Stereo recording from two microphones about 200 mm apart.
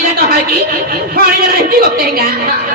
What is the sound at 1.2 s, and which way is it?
A man's voice, 50° right (ahead or behind).